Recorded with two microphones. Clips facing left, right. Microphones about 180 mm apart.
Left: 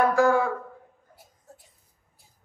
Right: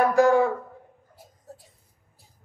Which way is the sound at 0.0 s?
15° right (ahead or behind).